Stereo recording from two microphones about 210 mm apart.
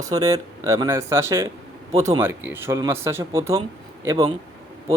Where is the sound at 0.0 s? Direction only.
15° right (ahead or behind).